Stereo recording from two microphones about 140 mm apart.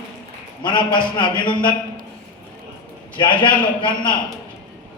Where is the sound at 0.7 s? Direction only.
35° left (ahead or behind).